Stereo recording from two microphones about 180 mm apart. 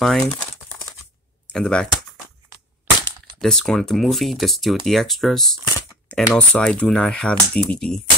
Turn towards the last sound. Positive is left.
turn(degrees=5)  # may be behind; listen again after turning